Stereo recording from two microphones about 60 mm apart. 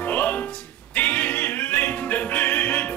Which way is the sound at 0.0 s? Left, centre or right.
Left.